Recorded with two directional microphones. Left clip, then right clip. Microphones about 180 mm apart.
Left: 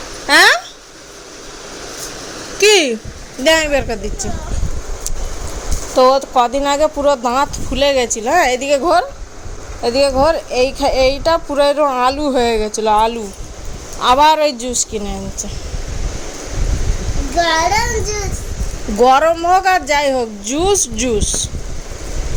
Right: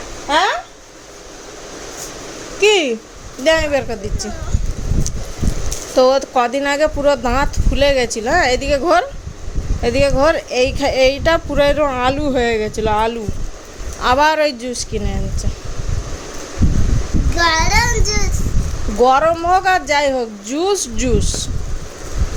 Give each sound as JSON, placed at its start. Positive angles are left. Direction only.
{"t": 0.3, "sound": "a sound", "side_deg": 25}
{"t": 2.6, "sound": "speech", "side_deg": 10}
{"t": 6.0, "sound": "a woman's voice", "side_deg": -10}
{"t": 17.4, "sound": "child singing", "side_deg": -15}
{"t": 18.9, "sound": "a woman's voice", "side_deg": 10}
{"t": 21.2, "sound": "child singing", "side_deg": -5}